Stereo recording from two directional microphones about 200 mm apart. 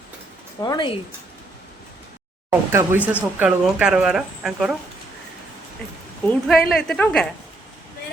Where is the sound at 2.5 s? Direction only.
10° right (ahead or behind).